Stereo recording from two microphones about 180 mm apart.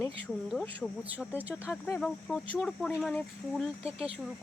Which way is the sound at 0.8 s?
Centre (ahead or behind).